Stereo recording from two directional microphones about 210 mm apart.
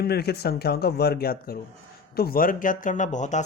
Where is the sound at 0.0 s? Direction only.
50° left (ahead or behind).